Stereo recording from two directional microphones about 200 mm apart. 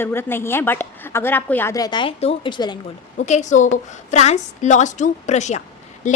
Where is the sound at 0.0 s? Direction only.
10° left (ahead or behind).